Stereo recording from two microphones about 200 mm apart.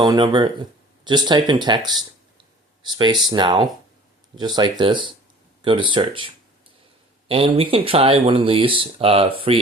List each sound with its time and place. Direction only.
0.0 s speech: 25° right (ahead or behind)